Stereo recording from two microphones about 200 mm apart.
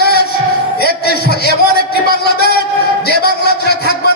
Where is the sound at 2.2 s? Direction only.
55° left (ahead or behind).